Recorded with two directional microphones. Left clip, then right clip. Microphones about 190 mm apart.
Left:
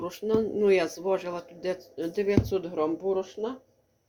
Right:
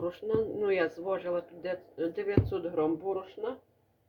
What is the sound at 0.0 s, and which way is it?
Speech, 65° left (ahead or behind).